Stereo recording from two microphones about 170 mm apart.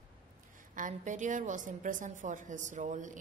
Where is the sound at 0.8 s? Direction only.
50° right (ahead or behind).